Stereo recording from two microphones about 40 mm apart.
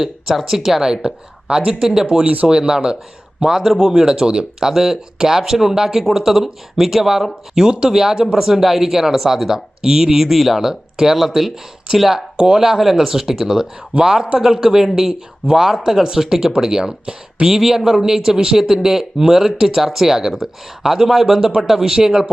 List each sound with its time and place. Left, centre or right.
0.0 s speech: centre
1.0 s speech: right
1.8 s speech: centre
2.0 s speech: right
3.6 s speech: centre
3.9 s speech: centre
7.5 s speech: right